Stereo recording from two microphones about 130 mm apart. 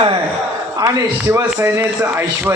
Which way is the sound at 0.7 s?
25° right (ahead or behind).